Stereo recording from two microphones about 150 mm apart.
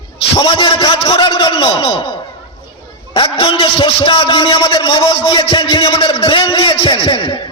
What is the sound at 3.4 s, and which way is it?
A man's voice, 35° left (ahead or behind).